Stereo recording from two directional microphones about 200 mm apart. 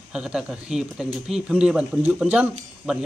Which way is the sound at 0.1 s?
5° right (ahead or behind).